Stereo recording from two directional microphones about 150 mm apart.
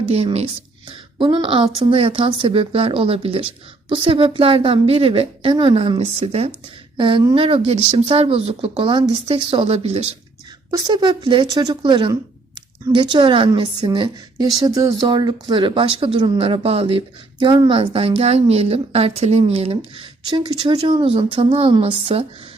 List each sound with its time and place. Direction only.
0.0 s a woman's voice: 40° right (ahead or behind)
10.7 s a woman's voice: 30° right (ahead or behind)